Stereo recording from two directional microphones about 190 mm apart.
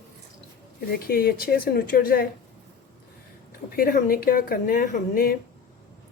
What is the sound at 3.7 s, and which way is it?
A woman's voice, 50° left (ahead or behind).